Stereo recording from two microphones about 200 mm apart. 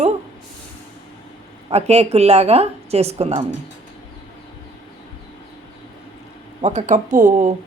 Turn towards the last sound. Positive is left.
turn(degrees=-40)  # may be behind; listen again after turning